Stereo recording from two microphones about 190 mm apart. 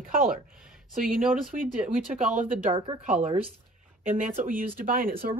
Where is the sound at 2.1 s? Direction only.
40° right (ahead or behind).